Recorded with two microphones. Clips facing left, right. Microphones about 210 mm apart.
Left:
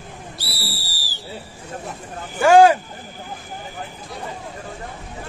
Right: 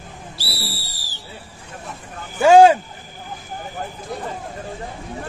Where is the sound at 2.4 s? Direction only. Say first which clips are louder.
Right 2 dB; 25° right (ahead or behind).